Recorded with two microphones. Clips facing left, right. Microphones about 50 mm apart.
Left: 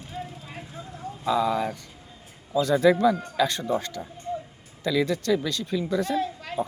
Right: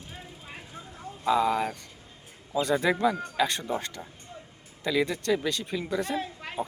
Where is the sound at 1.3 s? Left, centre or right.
Centre.